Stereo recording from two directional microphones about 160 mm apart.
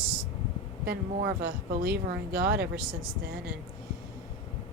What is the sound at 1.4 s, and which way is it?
Speech, 75° right (ahead or behind).